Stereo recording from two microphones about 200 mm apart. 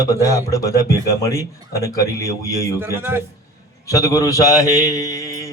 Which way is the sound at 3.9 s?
15° left (ahead or behind).